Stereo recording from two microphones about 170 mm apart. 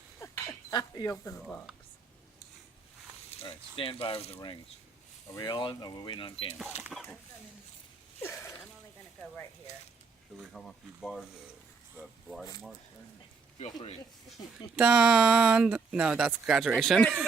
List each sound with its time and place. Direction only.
0.2 s a sound: 15° left (ahead or behind)
1.2 s speech: 15° left (ahead or behind)
3.2 s speech: 30° left (ahead or behind)
5.3 s speech: 25° left (ahead or behind)
6.9 s speech: centre (ahead or behind)
8.2 s speech: 15° left (ahead or behind)
10.4 s speech: centre (ahead or behind)
14.8 s speech: 5° right (ahead or behind)